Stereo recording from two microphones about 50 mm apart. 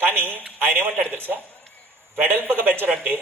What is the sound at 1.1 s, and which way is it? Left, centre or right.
A woman's voice, right.